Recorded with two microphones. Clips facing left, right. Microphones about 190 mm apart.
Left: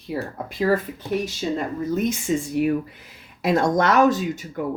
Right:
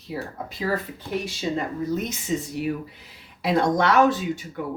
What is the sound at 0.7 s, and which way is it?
Speech, 45° left (ahead or behind).